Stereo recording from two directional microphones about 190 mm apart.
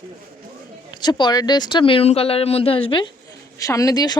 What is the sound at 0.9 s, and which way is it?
Speech, 25° left (ahead or behind).